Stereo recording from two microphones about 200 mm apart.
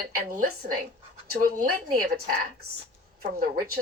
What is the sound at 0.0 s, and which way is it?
Speech, 45° right (ahead or behind).